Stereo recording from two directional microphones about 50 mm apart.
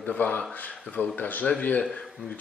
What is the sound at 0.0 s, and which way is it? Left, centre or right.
Speech, left.